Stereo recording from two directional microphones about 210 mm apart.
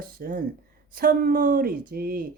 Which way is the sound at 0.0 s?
40° right (ahead or behind).